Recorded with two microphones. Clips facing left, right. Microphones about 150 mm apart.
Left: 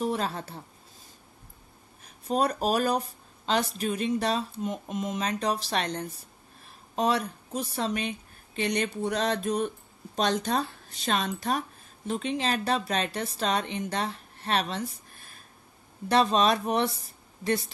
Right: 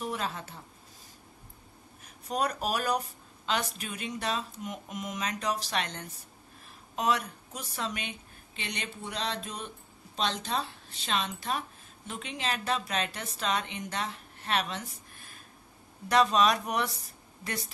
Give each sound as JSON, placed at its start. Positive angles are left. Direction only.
{"t": 0.0, "sound": "a woman's voice", "side_deg": 35}
{"t": 2.2, "sound": "speech", "side_deg": 30}
{"t": 8.5, "sound": "speech", "side_deg": 45}
{"t": 16.1, "sound": "speech", "side_deg": 30}